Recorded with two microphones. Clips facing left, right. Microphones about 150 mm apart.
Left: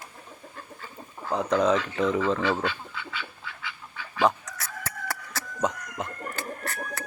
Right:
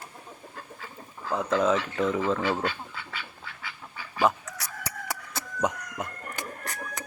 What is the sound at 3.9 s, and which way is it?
Chicken, 5° right (ahead or behind).